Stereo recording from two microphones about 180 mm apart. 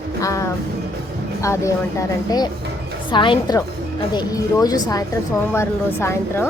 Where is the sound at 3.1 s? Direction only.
25° left (ahead or behind).